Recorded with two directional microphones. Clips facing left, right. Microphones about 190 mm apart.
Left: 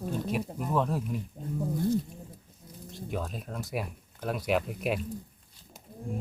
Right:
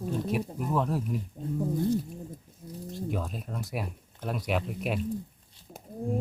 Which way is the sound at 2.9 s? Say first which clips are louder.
Right 2 dB; centre (ahead or behind).